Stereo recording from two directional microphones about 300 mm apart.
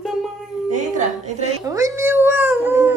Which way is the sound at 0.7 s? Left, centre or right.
Right.